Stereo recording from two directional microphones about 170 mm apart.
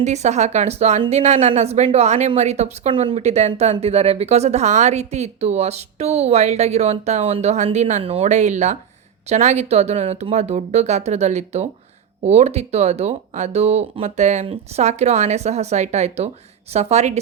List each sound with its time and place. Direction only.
0.0 s speech: 40° right (ahead or behind)